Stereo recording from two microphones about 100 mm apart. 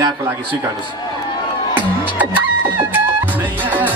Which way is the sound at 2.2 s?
20° right (ahead or behind).